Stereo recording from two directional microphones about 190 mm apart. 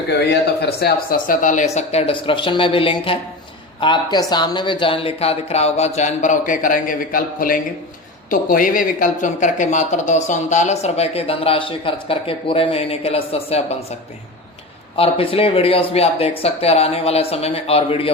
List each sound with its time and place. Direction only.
0.1 s speech: 60° left (ahead or behind); by 13.7 s 30° left (ahead or behind)
14.9 s speech: 30° left (ahead or behind)